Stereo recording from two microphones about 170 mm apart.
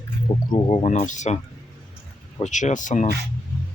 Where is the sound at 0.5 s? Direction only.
35° left (ahead or behind).